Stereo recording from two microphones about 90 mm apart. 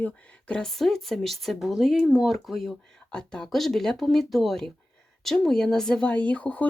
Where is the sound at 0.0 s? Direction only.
10° left (ahead or behind).